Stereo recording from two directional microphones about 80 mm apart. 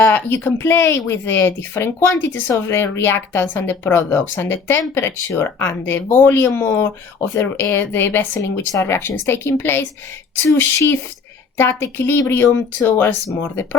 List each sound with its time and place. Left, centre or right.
0.0 s a woman's voice: left